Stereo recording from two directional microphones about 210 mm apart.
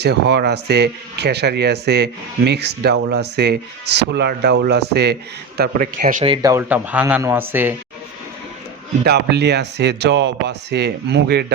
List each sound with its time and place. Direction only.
0.0 s speech: 50° right (ahead or behind)
6.2 s speech: 20° right (ahead or behind)
9.0 s speech: 50° right (ahead or behind)